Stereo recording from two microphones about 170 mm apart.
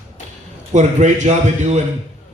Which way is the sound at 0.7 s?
45° right (ahead or behind).